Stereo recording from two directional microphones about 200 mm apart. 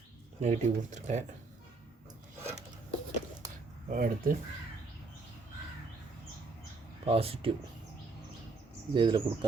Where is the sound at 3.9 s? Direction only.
45° right (ahead or behind).